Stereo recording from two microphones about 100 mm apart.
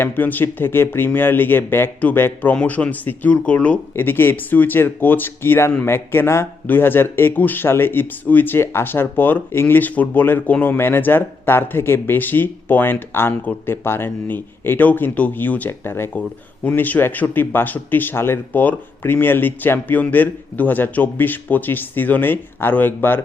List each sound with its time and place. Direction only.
0.0 s speech: 20° left (ahead or behind)